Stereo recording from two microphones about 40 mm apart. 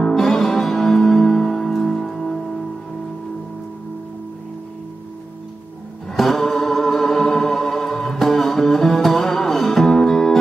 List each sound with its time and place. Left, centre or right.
0.0 s music: centre
6.1 s music: centre